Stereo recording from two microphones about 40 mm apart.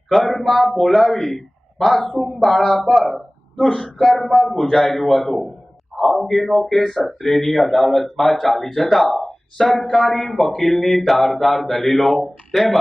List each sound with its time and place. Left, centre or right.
0.3 s speech: centre
3.6 s a man's voice: centre
4.8 s speech: centre